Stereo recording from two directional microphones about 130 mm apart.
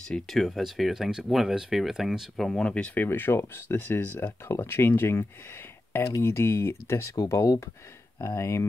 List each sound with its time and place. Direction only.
0.1 s speech: centre (ahead or behind); by 8.6 s 20° left (ahead or behind)